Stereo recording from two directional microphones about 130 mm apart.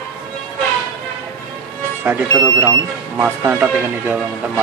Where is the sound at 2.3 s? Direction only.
25° right (ahead or behind).